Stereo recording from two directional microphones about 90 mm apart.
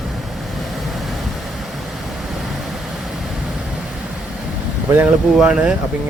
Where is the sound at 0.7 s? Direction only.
Centre (ahead or behind).